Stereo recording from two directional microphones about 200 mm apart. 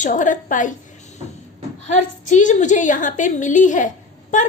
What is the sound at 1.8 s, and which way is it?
A woman's voice, 35° left (ahead or behind).